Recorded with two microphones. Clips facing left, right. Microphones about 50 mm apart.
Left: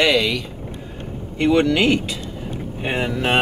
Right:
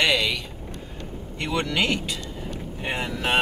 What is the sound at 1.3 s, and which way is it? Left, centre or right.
Speech, left.